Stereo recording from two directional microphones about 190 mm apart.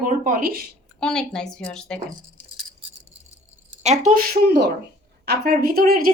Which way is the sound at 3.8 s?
40° right (ahead or behind).